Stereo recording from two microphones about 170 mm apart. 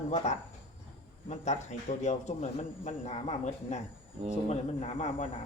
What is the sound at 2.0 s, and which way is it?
A man's voice, 40° left (ahead or behind).